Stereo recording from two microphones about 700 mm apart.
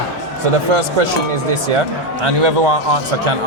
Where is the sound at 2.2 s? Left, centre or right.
Right.